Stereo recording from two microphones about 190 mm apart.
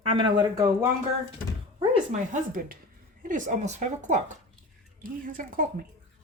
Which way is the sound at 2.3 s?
45° right (ahead or behind).